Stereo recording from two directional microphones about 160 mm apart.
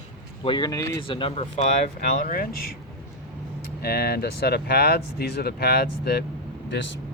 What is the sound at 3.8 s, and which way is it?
Speech, 75° left (ahead or behind).